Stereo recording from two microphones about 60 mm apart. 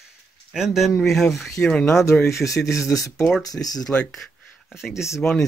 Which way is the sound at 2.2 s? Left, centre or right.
Left.